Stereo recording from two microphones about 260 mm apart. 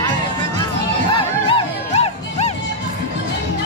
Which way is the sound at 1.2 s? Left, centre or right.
Centre.